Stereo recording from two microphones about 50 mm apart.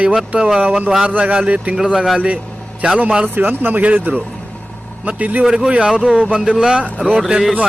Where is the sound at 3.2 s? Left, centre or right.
Right.